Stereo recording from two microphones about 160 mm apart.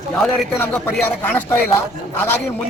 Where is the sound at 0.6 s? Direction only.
10° left (ahead or behind).